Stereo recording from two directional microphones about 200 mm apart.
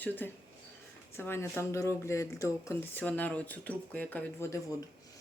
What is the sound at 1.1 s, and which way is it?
Speech, 10° left (ahead or behind).